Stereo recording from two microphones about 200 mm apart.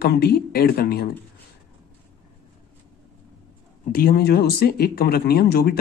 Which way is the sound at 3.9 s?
50° left (ahead or behind).